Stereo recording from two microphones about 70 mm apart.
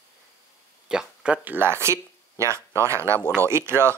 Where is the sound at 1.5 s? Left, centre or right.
Right.